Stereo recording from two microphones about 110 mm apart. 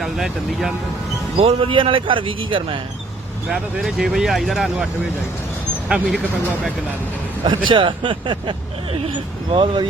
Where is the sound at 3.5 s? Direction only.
5° right (ahead or behind).